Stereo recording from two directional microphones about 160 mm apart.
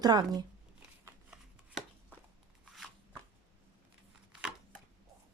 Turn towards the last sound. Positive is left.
turn(degrees=-5)  # may be behind; listen again after turning